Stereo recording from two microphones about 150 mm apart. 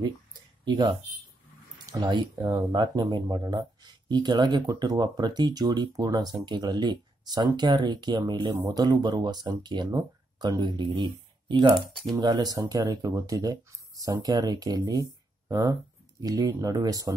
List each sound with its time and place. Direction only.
0.7 s speech: 30° right (ahead or behind)
2.0 s speech: 30° right (ahead or behind)